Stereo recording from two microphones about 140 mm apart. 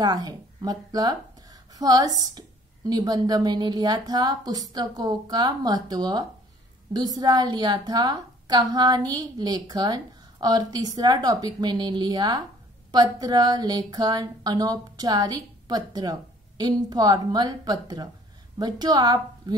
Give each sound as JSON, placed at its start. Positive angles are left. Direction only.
{"t": 0.0, "sound": "a woman's voice", "side_deg": -30}